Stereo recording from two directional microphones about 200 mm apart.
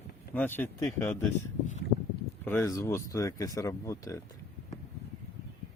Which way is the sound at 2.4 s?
10° left (ahead or behind).